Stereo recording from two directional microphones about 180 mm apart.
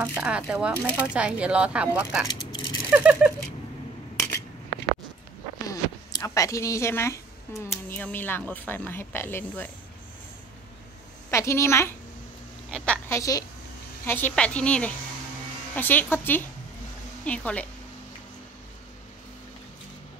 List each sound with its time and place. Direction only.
0.2 s speech: 5° right (ahead or behind)
2.2 s a sound: 25° left (ahead or behind)
2.9 s rattle: 5° right (ahead or behind)
5.7 s a sound: 20° left (ahead or behind)
7.9 s speech: 10° left (ahead or behind)
11.2 s a woman's voice: 15° left (ahead or behind)
13.2 s a woman's voice: 20° left (ahead or behind)